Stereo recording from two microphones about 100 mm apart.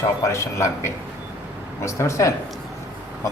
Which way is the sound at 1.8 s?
30° left (ahead or behind).